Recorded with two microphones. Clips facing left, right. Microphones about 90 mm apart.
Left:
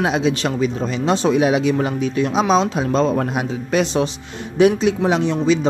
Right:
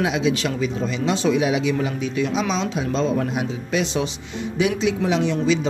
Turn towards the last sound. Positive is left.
turn(degrees=40)  # may be behind; listen again after turning